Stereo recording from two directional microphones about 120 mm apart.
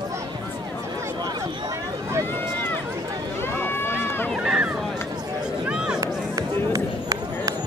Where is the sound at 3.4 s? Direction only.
20° left (ahead or behind).